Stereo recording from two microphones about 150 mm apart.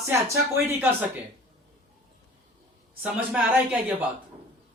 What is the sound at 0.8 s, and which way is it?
Speech, 15° right (ahead or behind).